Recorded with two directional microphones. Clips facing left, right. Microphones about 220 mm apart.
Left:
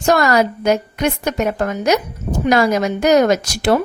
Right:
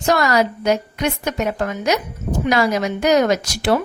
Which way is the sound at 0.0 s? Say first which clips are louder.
Left 3 dB; 50° left (ahead or behind).